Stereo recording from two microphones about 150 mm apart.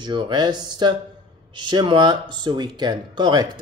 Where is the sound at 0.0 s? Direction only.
30° right (ahead or behind).